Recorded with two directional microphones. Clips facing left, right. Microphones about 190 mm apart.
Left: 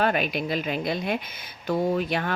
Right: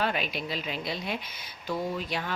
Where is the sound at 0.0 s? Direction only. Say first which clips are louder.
Left 6 dB; 55° left (ahead or behind).